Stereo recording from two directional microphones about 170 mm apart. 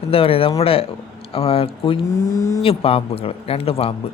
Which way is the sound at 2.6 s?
35° left (ahead or behind).